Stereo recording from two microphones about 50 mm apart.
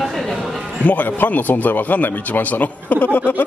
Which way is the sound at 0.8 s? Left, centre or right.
Left.